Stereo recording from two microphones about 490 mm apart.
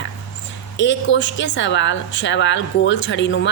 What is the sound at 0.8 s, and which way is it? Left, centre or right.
A woman's voice, left.